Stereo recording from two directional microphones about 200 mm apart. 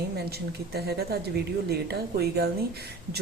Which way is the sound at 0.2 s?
55° right (ahead or behind).